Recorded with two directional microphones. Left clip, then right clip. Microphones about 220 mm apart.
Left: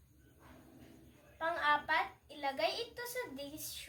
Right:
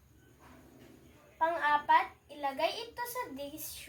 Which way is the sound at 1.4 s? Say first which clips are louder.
Right 4 dB; 15° left (ahead or behind).